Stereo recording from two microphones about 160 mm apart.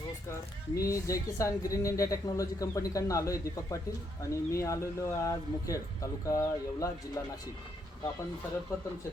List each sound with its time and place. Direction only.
0.8 s speech: 20° left (ahead or behind)